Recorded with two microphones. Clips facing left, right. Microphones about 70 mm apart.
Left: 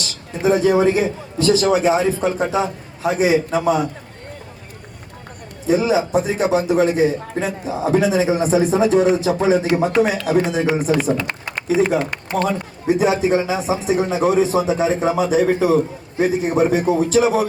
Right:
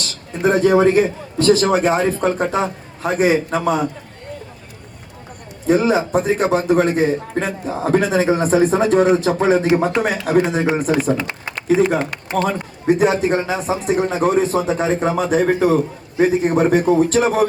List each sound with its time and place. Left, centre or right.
0.0 s a man's voice: right
5.6 s a man's voice: right
11.3 s typing: left
11.7 s a man's voice: right